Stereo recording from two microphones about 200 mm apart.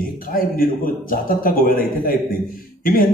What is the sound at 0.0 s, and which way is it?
A man's voice, 45° left (ahead or behind).